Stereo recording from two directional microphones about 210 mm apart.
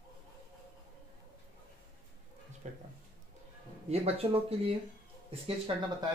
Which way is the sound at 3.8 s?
30° right (ahead or behind).